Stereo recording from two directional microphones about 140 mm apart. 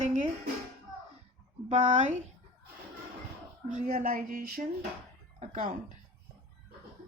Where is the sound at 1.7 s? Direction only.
55° right (ahead or behind).